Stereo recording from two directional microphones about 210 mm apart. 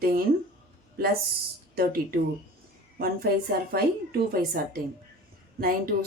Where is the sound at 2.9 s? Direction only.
45° right (ahead or behind).